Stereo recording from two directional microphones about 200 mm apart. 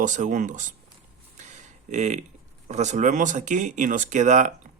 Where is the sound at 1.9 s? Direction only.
35° right (ahead or behind).